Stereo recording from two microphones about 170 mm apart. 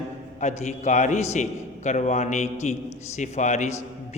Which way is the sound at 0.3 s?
45° left (ahead or behind).